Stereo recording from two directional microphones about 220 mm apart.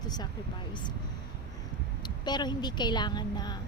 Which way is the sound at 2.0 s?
20° left (ahead or behind).